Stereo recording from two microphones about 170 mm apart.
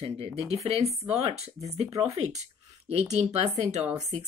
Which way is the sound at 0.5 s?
40° right (ahead or behind).